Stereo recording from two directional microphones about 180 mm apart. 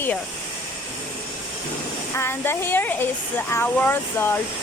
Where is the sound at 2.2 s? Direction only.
10° left (ahead or behind).